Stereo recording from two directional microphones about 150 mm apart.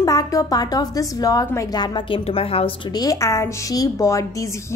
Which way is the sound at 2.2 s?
40° left (ahead or behind).